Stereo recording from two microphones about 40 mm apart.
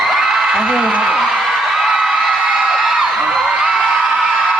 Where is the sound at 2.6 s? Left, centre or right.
Centre.